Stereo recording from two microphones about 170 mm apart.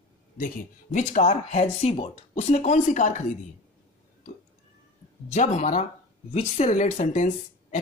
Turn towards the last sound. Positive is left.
turn(degrees=45)  # may be behind; listen again after turning